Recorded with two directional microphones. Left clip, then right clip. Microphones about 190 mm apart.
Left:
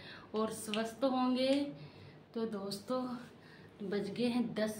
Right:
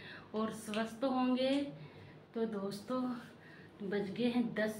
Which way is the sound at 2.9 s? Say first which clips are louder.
Left 2 dB; 15° left (ahead or behind).